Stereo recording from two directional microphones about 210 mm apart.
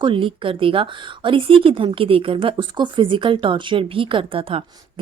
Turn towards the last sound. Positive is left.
turn(degrees=-25)  # may be behind; listen again after turning